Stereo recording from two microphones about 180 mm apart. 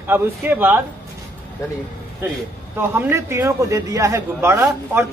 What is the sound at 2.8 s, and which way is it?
A man's voice, 15° right (ahead or behind).